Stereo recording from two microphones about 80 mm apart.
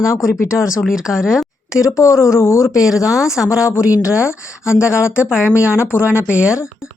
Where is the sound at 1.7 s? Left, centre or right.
Left.